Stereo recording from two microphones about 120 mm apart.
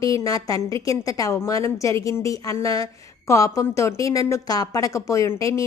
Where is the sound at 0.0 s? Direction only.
30° left (ahead or behind).